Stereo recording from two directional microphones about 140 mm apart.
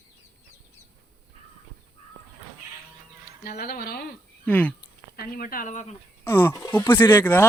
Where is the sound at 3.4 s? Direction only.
90° left.